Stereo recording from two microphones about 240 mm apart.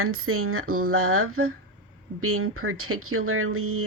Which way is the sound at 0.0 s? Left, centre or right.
Right.